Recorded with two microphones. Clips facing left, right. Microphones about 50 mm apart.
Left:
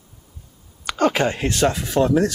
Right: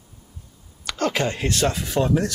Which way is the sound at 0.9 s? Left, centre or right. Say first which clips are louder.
Left 4 dB; left.